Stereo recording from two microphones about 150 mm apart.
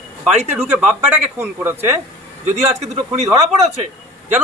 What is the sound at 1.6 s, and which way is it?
Speech, 15° right (ahead or behind).